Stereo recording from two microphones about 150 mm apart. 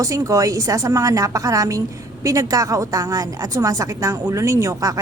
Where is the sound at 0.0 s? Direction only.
20° right (ahead or behind).